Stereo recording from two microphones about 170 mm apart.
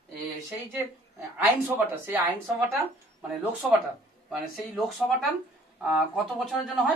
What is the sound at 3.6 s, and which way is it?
Speech, 5° right (ahead or behind).